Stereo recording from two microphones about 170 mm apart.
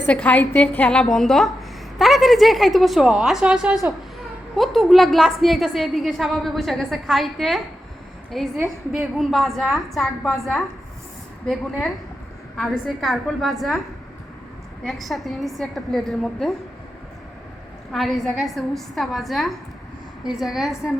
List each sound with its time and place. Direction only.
0.0 s a woman's voice: 10° left (ahead or behind)
12.5 s a woman's voice: centre (ahead or behind)
14.8 s a woman's voice: centre (ahead or behind)
17.9 s a woman's voice: centre (ahead or behind)